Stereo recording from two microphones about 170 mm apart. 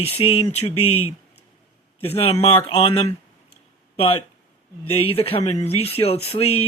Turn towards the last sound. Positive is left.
turn(degrees=35)  # may be behind; listen again after turning